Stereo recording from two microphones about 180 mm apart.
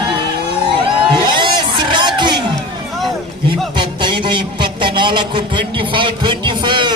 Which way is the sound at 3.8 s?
25° right (ahead or behind).